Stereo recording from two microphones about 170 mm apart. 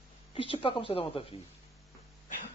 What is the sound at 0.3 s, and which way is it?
Speech, 30° left (ahead or behind).